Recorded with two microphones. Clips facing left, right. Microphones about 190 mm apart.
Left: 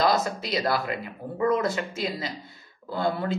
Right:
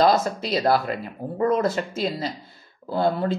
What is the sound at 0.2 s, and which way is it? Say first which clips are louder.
Speech: right 4 dB; 30° right (ahead or behind).